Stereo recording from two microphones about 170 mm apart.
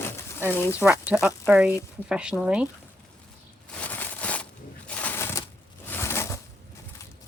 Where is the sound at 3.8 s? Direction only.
10° left (ahead or behind).